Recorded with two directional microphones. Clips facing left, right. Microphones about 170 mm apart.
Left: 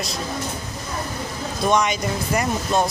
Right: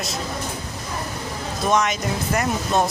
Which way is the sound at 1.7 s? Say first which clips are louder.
Left 1 dB; centre (ahead or behind).